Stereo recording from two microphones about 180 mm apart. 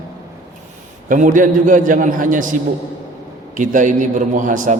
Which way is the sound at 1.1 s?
45° right (ahead or behind).